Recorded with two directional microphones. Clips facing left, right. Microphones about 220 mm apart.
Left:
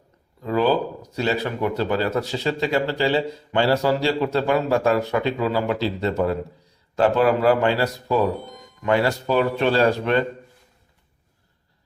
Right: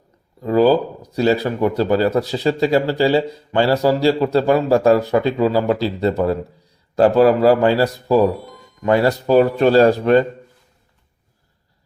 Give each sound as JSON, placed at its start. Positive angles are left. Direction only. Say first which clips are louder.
{"t": 0.4, "sound": "speech", "louder": "right 6 dB", "side_deg": -35}